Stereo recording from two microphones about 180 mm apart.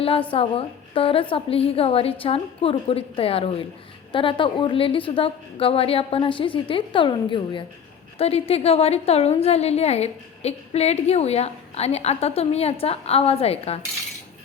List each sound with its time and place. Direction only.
0.0 s a woman's voice: 30° left (ahead or behind)